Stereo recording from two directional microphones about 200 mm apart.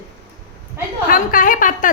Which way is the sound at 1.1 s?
45° left (ahead or behind).